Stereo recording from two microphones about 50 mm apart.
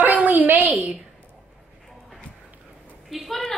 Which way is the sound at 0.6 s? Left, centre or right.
Right.